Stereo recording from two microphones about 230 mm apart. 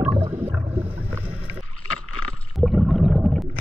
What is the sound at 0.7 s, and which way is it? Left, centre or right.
Boat, centre.